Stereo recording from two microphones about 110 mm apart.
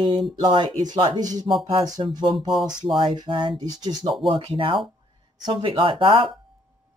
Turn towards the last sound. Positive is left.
turn(degrees=-50)  # may be behind; listen again after turning